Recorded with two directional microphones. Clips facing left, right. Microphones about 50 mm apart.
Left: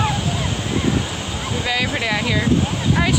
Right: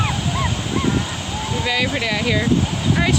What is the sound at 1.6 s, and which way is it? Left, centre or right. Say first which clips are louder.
Speech: right 1 dB; centre.